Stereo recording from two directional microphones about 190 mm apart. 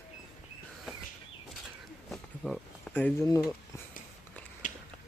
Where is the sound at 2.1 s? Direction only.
Centre (ahead or behind).